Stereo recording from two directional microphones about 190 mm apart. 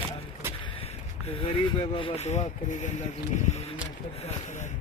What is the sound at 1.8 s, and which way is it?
Speech, 30° left (ahead or behind).